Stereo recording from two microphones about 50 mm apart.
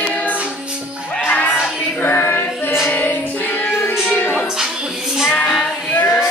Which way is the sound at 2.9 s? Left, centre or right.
Left.